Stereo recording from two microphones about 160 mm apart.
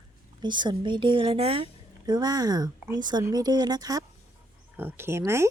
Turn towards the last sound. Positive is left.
turn(degrees=-15)  # may be behind; listen again after turning